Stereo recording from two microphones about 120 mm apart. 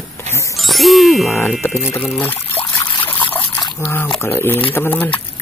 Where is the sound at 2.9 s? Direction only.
45° left (ahead or behind).